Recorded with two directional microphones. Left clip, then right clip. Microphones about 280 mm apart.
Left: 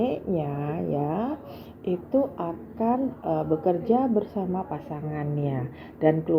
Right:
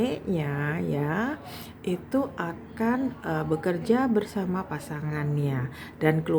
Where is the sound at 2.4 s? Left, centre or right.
Right.